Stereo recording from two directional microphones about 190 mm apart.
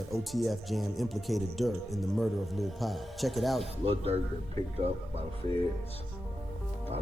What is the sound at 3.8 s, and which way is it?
Speech, 30° right (ahead or behind).